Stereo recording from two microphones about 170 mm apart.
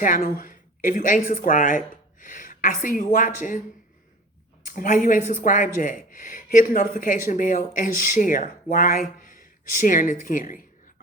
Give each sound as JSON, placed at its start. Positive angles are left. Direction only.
{"t": 0.0, "sound": "speech", "side_deg": 55}
{"t": 4.6, "sound": "speech", "side_deg": 50}